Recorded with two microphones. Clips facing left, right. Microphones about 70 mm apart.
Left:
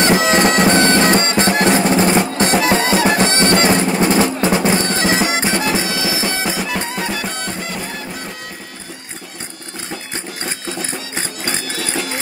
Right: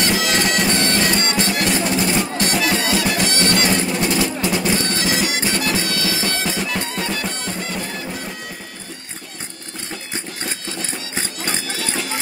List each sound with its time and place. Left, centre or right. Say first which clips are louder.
0.0 s bagpipes: left 6 dB; left
0.7 s music: left 6 dB; left; by 8.2 s centre
10.4 s music: left 5 dB; centre